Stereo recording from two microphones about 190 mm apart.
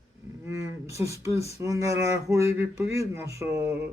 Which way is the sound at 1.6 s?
15° right (ahead or behind).